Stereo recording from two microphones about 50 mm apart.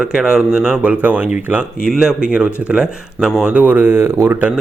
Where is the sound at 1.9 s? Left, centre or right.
Centre.